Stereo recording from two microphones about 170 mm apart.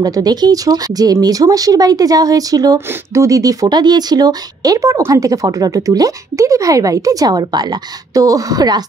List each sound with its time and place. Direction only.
0.0 s speech: 20° right (ahead or behind)